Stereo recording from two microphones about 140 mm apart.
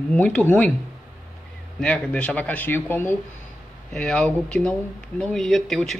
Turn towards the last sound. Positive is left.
turn(degrees=0)  # may be behind; listen again after turning